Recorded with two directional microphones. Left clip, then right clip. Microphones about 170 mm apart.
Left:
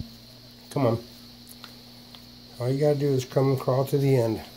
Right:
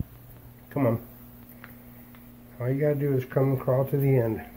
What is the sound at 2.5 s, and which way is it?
Speech, 25° left (ahead or behind).